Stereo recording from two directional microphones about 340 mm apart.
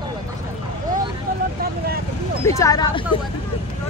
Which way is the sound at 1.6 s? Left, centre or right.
Right.